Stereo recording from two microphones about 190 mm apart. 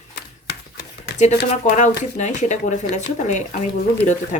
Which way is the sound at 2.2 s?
40° left (ahead or behind).